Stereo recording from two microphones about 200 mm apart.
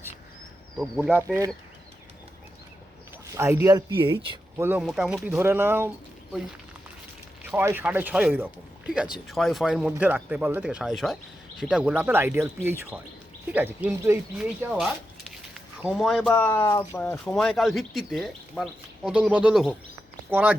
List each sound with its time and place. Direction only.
0.8 s speech: centre (ahead or behind)
3.3 s speech: 15° right (ahead or behind)
4.5 s speech: 10° right (ahead or behind)
7.4 s speech: 10° right (ahead or behind)